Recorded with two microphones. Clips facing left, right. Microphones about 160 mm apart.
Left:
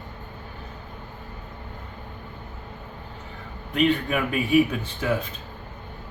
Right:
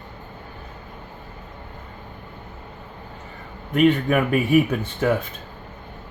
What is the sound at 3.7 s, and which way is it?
Speech, 50° right (ahead or behind).